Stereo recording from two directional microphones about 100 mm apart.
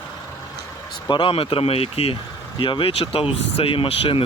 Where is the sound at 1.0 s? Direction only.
55° left (ahead or behind); by 2.1 s 75° left (ahead or behind).